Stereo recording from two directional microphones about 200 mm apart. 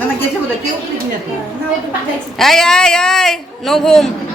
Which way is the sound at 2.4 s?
Centre (ahead or behind).